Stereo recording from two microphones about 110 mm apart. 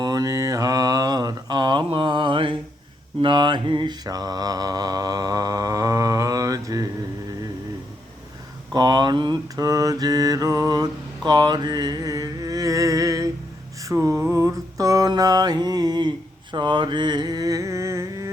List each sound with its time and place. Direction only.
0.0 s mantra: 35° right (ahead or behind)
8.7 s mantra: 40° right (ahead or behind)
11.3 s music: 40° right (ahead or behind)
13.8 s mantra: 30° right (ahead or behind)